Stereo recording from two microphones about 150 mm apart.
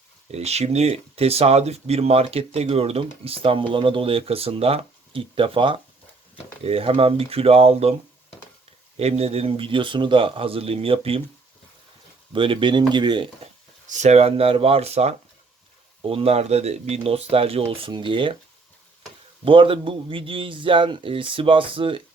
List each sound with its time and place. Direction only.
0.3 s speech: 45° right (ahead or behind)
9.0 s speech: 40° right (ahead or behind)
12.3 s speech: 35° right (ahead or behind)
13.8 s speech: 50° right (ahead or behind); by 18.3 s 35° right (ahead or behind)
19.5 s speech: 35° right (ahead or behind)